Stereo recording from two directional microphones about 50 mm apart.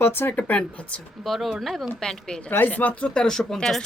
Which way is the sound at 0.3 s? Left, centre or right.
Left.